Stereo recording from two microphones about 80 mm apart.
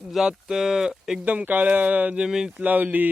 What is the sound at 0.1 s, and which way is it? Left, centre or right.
Speech, centre.